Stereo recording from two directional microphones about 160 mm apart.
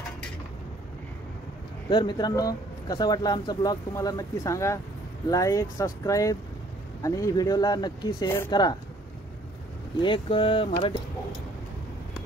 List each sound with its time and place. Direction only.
1.9 s speech: 25° left (ahead or behind)
10.0 s speech: 35° left (ahead or behind)